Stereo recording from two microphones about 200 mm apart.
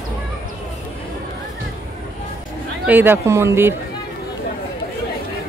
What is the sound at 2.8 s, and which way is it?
Speech, 10° right (ahead or behind).